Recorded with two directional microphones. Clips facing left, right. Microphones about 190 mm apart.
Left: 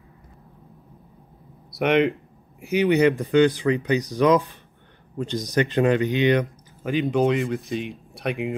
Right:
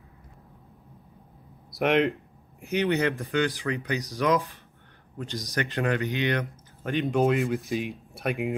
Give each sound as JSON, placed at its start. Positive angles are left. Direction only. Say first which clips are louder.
{"t": 1.7, "sound": "speech", "louder": "left 3 dB", "side_deg": 0}
{"t": 6.8, "sound": "speech", "louder": "left 3 dB", "side_deg": 0}